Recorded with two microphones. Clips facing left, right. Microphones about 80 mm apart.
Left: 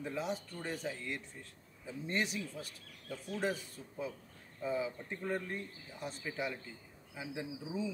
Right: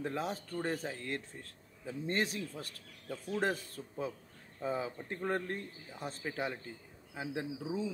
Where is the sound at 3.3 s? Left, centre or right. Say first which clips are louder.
Right 3 dB; right.